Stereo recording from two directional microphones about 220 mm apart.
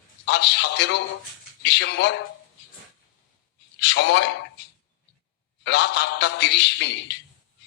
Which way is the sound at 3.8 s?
50° left (ahead or behind).